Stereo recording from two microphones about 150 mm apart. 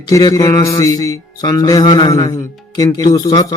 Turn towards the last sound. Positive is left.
turn(degrees=25)  # may be behind; listen again after turning